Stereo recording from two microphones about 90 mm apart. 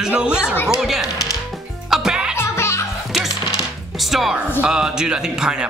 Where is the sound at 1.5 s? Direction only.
5° right (ahead or behind).